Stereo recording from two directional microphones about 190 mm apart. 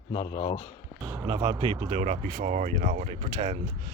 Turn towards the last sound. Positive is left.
turn(degrees=-30)  # may be behind; listen again after turning